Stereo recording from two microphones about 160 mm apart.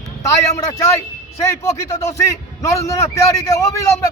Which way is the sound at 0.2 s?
20° left (ahead or behind).